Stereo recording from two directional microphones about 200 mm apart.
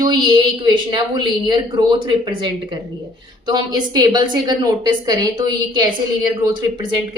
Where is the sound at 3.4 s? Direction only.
20° right (ahead or behind).